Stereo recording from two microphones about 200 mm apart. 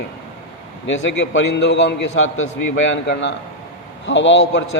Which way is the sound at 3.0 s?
65° left (ahead or behind).